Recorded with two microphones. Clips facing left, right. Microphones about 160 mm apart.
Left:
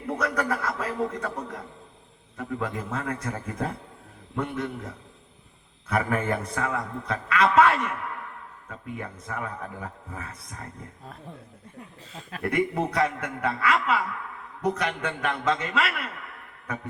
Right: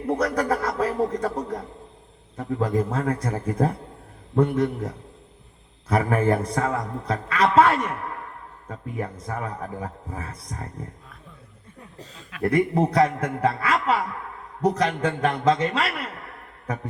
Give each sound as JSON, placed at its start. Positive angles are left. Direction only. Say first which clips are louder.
{"t": 0.0, "sound": "a man's voice", "louder": "right 4 dB", "side_deg": -30}
{"t": 5.9, "sound": "a man's voice", "louder": "right 5 dB", "side_deg": -30}
{"t": 12.4, "sound": "a man's voice", "louder": "right 5 dB", "side_deg": -30}